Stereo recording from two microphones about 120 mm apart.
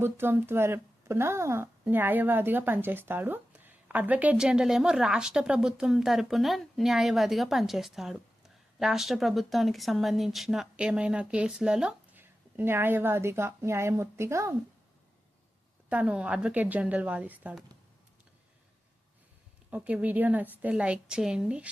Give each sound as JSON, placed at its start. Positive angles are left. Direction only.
{"t": 0.0, "sound": "speech", "side_deg": -20}
{"t": 15.9, "sound": "speech", "side_deg": -10}
{"t": 19.7, "sound": "speech", "side_deg": -10}